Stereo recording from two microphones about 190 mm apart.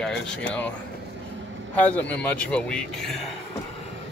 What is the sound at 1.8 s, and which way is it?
A man's voice, 10° left (ahead or behind).